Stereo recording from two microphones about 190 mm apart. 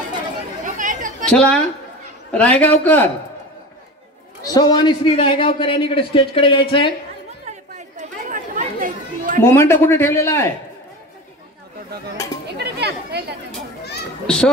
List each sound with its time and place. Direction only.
0.7 s chatter: 40° right (ahead or behind)
1.2 s a woman's voice: 5° left (ahead or behind)
4.6 s a man's voice: 20° left (ahead or behind)
7.4 s chatter: 40° right (ahead or behind)
9.4 s speech: 15° left (ahead or behind)
12.4 s chatter: 60° right (ahead or behind)
14.2 s a child's voice: 5° left (ahead or behind)